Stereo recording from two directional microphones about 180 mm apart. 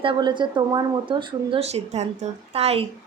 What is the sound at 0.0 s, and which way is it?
Speech, 25° right (ahead or behind).